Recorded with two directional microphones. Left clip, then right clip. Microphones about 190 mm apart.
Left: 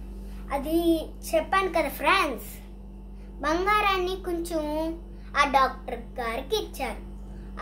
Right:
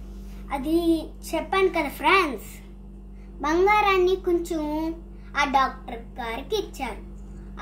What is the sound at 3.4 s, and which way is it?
A child's voice, 10° left (ahead or behind).